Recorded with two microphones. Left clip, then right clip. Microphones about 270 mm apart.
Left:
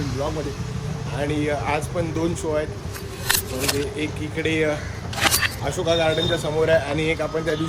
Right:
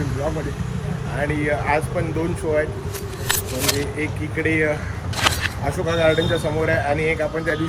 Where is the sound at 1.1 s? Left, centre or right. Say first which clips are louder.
Right 2 dB; centre.